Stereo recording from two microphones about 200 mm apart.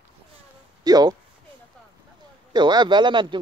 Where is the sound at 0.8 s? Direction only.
20° right (ahead or behind).